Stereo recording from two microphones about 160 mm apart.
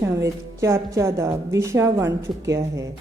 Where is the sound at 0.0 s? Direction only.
20° right (ahead or behind).